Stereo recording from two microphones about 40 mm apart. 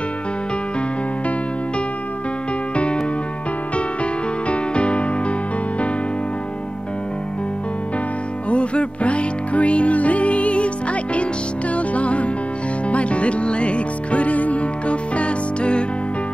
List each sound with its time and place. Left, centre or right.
2.7 s music: left
8.5 s music: left